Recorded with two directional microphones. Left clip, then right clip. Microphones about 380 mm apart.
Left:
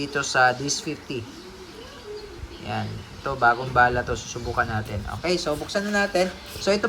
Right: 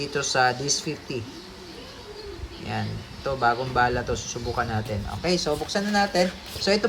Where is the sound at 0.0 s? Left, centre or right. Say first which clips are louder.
Left 2 dB; centre.